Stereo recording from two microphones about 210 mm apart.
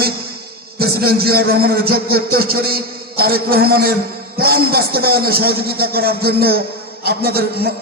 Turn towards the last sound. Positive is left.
turn(degrees=-45)  # may be behind; listen again after turning